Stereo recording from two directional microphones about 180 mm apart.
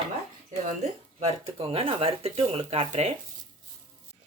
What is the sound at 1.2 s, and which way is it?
Speech, 35° right (ahead or behind).